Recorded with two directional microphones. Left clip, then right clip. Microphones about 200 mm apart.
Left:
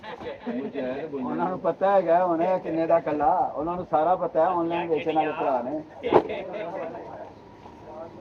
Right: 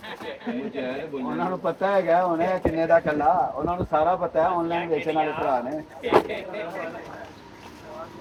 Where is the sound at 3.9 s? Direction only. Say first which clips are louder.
Even; 70° right (ahead or behind).